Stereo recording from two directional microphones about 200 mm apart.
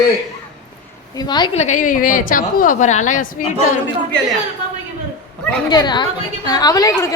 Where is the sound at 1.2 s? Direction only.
20° left (ahead or behind).